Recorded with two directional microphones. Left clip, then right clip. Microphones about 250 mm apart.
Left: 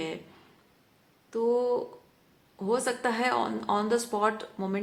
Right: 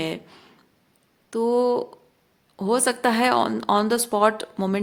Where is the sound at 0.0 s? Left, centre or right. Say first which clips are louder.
Right 6 dB; right.